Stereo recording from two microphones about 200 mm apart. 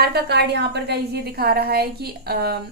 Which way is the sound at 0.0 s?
55° right (ahead or behind).